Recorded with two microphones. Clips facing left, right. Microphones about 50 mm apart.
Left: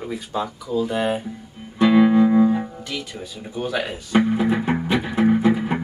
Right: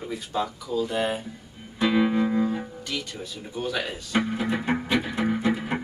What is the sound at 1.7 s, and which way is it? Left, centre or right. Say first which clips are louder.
Music: left 7 dB; centre.